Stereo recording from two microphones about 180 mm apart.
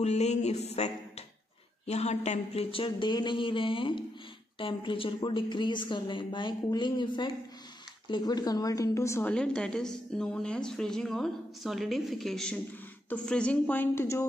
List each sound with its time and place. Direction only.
0.0 s music: 40° left (ahead or behind)
1.9 s a woman's voice: 35° left (ahead or behind); by 14.2 s 15° left (ahead or behind)